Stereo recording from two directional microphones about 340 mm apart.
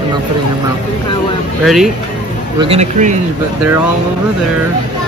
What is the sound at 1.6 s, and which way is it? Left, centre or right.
Speech, centre.